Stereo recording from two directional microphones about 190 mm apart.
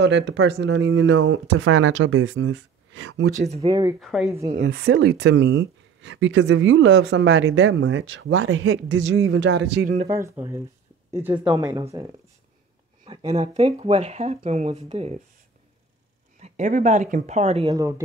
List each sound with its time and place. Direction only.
0.0 s speech: 65° right (ahead or behind); by 3.3 s 85° right
3.3 s speech: 35° right (ahead or behind)
3.6 s speech: 20° right (ahead or behind)
4.0 s speech: centre (ahead or behind)
4.6 s speech: 60° right (ahead or behind)
10.0 s speech: 15° right (ahead or behind)
11.5 s speech: 20° right (ahead or behind)
13.0 s speech: 30° right (ahead or behind)
16.3 s speech: 40° right (ahead or behind)
17.6 s speech: 15° right (ahead or behind)